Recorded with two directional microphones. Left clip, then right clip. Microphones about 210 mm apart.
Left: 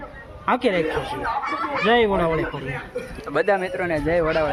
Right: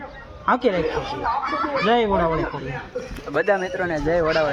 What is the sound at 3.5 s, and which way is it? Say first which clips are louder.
Speech: even; 10° left (ahead or behind).